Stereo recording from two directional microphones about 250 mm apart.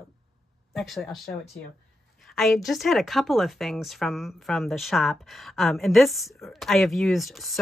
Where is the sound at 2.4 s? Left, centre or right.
Centre.